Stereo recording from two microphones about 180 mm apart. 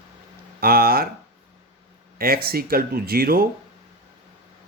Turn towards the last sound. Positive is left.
turn(degrees=-55)  # may be behind; listen again after turning